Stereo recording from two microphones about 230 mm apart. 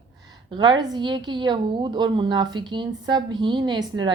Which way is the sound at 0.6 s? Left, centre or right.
Centre.